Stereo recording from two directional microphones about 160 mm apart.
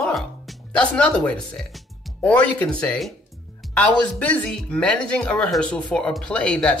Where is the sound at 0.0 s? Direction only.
5° left (ahead or behind).